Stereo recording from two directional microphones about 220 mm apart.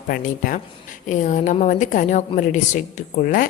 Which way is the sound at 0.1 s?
40° left (ahead or behind).